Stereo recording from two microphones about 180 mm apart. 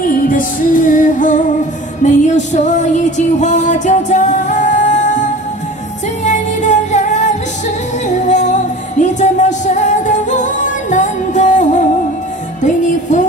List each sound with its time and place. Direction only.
0.0 s music: 50° left (ahead or behind)